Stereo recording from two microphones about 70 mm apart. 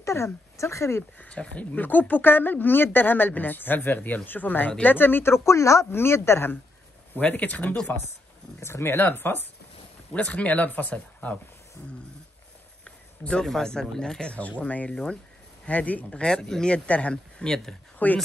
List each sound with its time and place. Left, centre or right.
0.0 s speech: left
1.1 s speech: centre; by 6.6 s left
7.2 s speech: left
8.5 s speech: left
10.1 s speech: left
12.8 s speech: centre
14.6 s speech: left
14.9 s speech: centre
15.6 s speech: left
17.9 s speech: left